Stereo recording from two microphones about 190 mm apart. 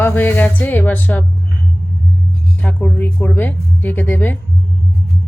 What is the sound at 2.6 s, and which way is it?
Speech, 10° left (ahead or behind).